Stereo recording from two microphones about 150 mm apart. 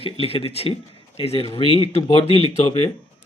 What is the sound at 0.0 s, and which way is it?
Speech, 40° left (ahead or behind).